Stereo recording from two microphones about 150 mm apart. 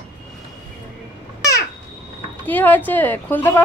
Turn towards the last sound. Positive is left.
turn(degrees=15)  # may be behind; listen again after turning